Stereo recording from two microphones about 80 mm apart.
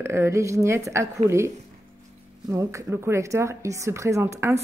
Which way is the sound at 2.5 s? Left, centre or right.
Right.